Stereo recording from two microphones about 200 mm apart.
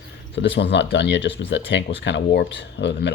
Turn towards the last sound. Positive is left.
turn(degrees=60)  # may be behind; listen again after turning